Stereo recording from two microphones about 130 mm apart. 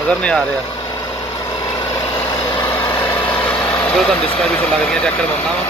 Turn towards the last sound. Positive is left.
turn(degrees=10)  # may be behind; listen again after turning